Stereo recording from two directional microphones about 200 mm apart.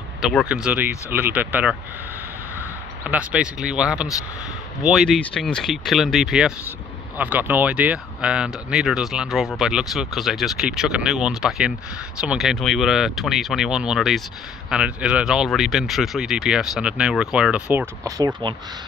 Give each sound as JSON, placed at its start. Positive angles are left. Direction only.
{"t": 0.2, "sound": "speech", "side_deg": 0}
{"t": 3.0, "sound": "speech", "side_deg": -5}
{"t": 18.0, "sound": "speech", "side_deg": -20}